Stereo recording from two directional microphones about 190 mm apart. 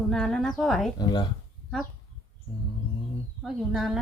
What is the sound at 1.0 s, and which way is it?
Speech, 25° left (ahead or behind).